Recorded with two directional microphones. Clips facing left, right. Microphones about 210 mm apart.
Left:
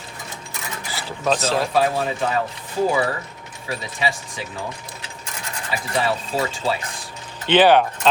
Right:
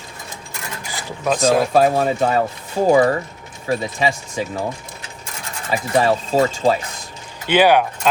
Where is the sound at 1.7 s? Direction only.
45° right (ahead or behind).